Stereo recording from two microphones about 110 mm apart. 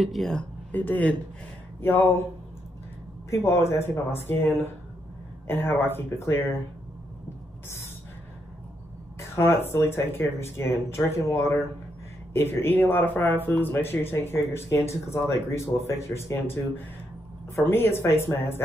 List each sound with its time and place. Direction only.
0.0 s speech: centre (ahead or behind); by 2.2 s 20° left (ahead or behind)
3.3 s speech: 25° left (ahead or behind)
9.2 s speech: 25° left (ahead or behind)